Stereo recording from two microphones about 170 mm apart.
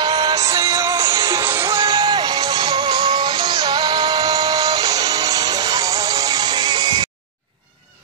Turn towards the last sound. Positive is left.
turn(degrees=-25)  # may be behind; listen again after turning